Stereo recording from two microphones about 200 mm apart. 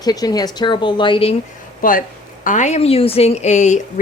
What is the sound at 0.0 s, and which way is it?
Speech, 20° left (ahead or behind).